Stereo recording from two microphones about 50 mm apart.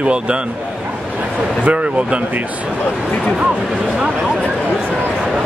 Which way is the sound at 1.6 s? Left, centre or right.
Right.